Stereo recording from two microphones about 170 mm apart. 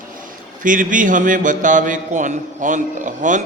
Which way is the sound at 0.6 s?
50° right (ahead or behind).